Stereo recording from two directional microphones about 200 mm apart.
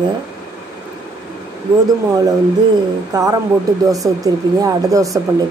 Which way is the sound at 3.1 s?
20° right (ahead or behind).